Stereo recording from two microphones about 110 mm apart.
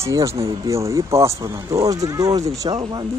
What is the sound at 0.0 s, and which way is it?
Speech, 30° right (ahead or behind).